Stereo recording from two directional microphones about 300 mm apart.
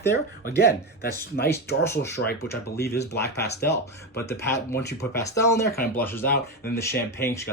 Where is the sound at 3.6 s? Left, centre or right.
Centre.